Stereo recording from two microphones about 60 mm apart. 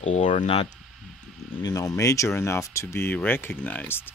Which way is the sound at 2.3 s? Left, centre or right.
Left.